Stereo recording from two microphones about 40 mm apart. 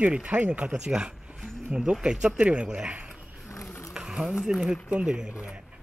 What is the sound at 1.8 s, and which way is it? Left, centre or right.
Speech, centre.